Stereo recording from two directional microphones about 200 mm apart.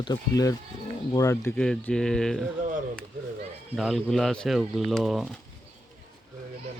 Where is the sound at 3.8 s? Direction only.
Centre (ahead or behind).